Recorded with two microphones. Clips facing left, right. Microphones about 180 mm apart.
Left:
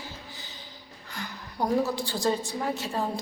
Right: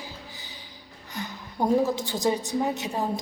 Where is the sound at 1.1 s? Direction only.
15° right (ahead or behind).